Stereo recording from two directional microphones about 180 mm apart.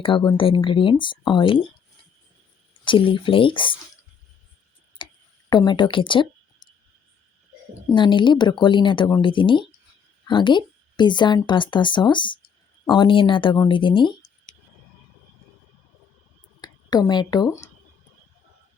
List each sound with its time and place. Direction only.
0.0 s a woman's voice: 30° left (ahead or behind)
2.8 s a woman's voice: 30° left (ahead or behind)
5.0 s tick: 25° left (ahead or behind)
5.5 s speech: 25° left (ahead or behind)
7.9 s a woman's voice: 25° left (ahead or behind)
16.6 s speech: 25° left (ahead or behind)